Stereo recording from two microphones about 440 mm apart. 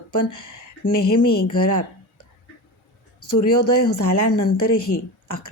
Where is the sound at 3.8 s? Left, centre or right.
Left.